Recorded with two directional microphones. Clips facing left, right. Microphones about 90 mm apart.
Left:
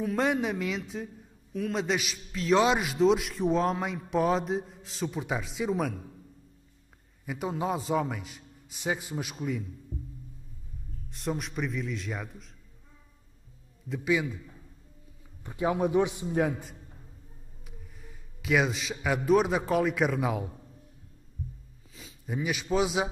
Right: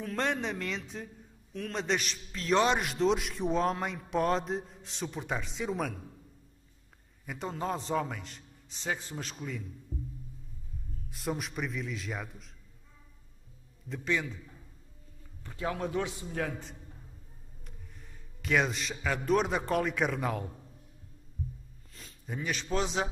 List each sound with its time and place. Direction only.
0.0 s a man's voice: 5° left (ahead or behind)
7.2 s a man's voice: 5° left (ahead or behind)
11.1 s a man's voice: centre (ahead or behind)
13.8 s a man's voice: 5° left (ahead or behind)
15.4 s a man's voice: 20° left (ahead or behind)
17.6 s a man's voice: 5° left (ahead or behind)
21.9 s a man's voice: 5° left (ahead or behind)